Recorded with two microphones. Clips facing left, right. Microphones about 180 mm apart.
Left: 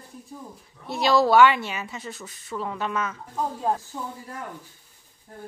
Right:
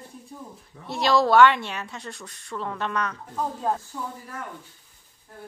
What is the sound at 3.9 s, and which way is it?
Speech, 20° left (ahead or behind).